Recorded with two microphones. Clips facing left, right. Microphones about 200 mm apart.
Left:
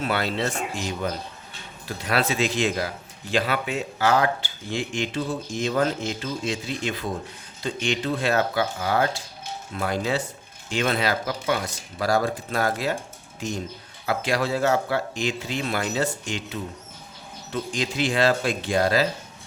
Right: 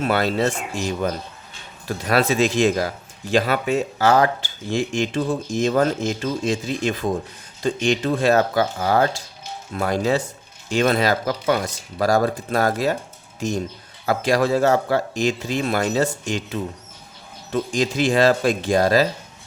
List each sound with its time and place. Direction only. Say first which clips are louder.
0.0 s speech: right 5 dB; 45° right (ahead or behind)
14.1 s speech: right 6 dB; 45° right (ahead or behind)